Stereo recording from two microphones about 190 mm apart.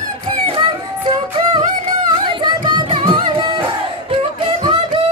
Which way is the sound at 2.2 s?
25° right (ahead or behind).